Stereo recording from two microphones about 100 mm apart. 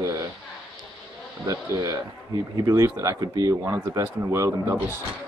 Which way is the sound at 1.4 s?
35° right (ahead or behind).